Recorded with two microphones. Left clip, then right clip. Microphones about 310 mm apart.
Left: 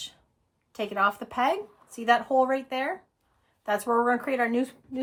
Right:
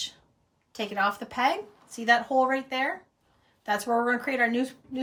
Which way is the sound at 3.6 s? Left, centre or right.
Centre.